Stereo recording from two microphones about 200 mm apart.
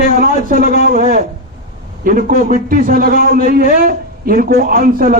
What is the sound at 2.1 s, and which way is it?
A man's voice, 45° right (ahead or behind).